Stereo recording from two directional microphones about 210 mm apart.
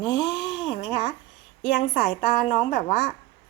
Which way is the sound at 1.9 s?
45° left (ahead or behind).